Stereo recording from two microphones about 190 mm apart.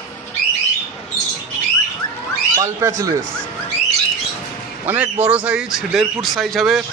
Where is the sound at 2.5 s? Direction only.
15° right (ahead or behind).